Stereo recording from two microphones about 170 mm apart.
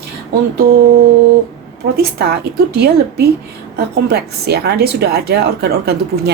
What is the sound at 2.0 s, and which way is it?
Speech, 70° right (ahead or behind).